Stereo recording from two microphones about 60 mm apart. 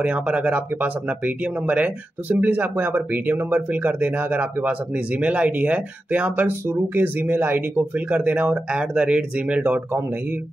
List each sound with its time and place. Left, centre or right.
0.0 s speech: right
6.7 s speech: right